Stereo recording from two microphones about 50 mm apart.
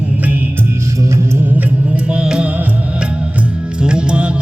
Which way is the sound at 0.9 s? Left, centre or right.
Right.